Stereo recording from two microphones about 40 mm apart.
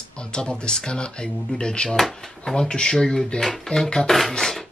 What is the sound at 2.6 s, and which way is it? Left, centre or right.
Speech, centre.